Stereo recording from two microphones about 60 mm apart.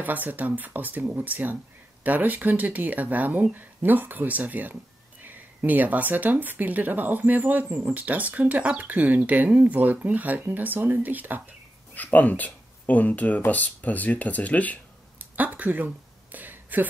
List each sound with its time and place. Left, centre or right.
0.0 s speech: right
11.9 s speech: left
15.1 s a sound: right